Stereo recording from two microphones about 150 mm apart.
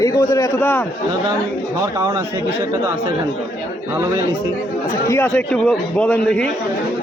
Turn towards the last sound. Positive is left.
turn(degrees=5)  # may be behind; listen again after turning